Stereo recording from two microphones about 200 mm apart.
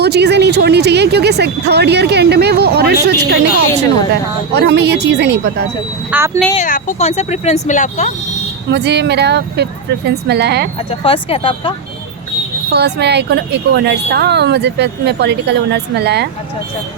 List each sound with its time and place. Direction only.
0.0 s speech: 55° right (ahead or behind)
6.1 s speech: 10° right (ahead or behind)
6.6 s speech: 40° left (ahead or behind)
8.7 s speech: 55° right (ahead or behind)
11.0 s speech: 25° left (ahead or behind)
12.7 s speech: 55° right (ahead or behind)